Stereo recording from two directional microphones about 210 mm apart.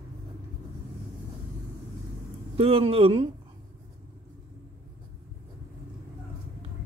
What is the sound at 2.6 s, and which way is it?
Speech, 25° right (ahead or behind).